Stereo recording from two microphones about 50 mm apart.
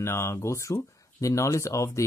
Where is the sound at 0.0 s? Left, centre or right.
Left.